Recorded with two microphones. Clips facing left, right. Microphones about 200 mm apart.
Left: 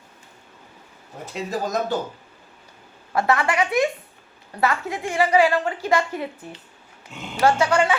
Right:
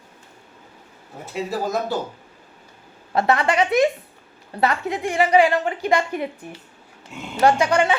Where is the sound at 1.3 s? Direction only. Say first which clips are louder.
Right 1 dB; 5° right (ahead or behind).